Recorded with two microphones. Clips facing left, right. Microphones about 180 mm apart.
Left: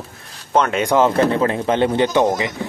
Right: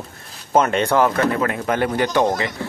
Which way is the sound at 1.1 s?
30° left (ahead or behind).